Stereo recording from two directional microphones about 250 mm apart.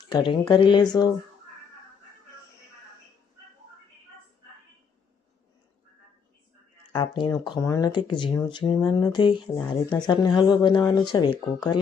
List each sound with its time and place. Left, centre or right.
0.1 s speech: centre
6.9 s speech: centre
9.6 s speech: centre
10.1 s speech: centre